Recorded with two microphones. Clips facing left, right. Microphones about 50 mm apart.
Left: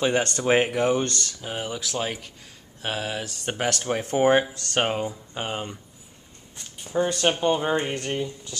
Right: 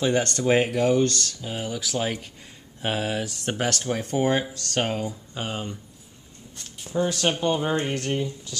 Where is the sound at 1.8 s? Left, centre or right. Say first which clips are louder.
Right 2 dB; centre.